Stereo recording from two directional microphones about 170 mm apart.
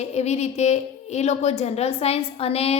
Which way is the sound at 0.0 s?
40° left (ahead or behind).